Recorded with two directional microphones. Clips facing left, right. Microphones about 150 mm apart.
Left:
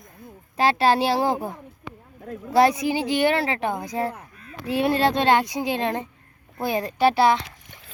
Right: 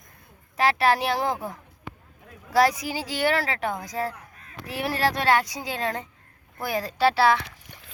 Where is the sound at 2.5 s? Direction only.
25° left (ahead or behind).